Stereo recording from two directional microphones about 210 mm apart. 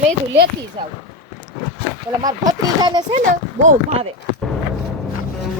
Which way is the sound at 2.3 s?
20° right (ahead or behind).